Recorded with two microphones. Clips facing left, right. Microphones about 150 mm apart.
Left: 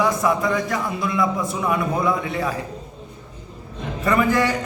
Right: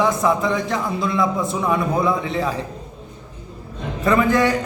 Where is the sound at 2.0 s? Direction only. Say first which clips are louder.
Right 2 dB; 20° right (ahead or behind).